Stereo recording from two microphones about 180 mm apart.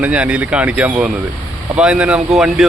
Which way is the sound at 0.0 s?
5° right (ahead or behind).